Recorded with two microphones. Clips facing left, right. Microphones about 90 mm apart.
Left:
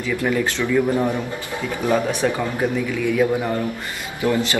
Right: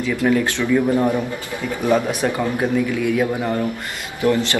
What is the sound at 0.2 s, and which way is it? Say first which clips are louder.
Speech: right 3 dB; 20° right (ahead or behind).